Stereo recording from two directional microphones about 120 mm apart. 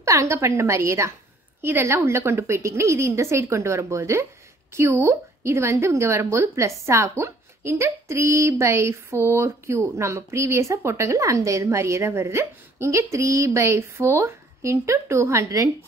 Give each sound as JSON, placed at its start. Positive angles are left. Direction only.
{"t": 0.0, "sound": "a woman's voice", "side_deg": -25}